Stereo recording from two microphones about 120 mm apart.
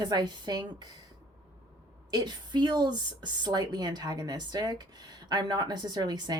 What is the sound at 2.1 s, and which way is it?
A woman's voice, 35° right (ahead or behind).